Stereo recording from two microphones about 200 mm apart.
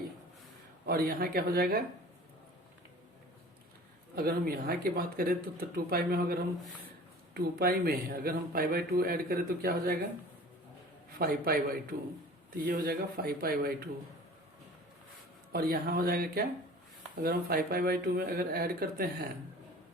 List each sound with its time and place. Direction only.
0.9 s speech: 50° right (ahead or behind)
4.1 s speech: 50° right (ahead or behind)
11.2 s speech: 45° right (ahead or behind)
15.5 s speech: 50° right (ahead or behind)